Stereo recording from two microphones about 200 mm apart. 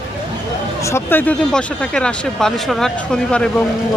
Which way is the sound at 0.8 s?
15° left (ahead or behind).